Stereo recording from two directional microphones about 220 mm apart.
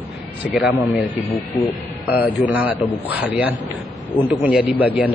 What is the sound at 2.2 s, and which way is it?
A man's voice, 5° right (ahead or behind).